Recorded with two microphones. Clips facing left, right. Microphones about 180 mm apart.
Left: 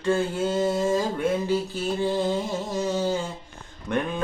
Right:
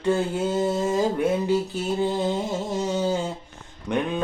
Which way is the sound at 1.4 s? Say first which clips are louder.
Right 2 dB; 20° right (ahead or behind).